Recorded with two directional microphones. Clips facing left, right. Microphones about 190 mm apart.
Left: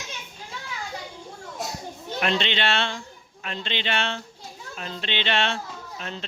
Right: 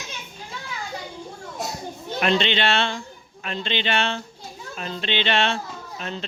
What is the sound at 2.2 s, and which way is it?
Speech, 25° right (ahead or behind).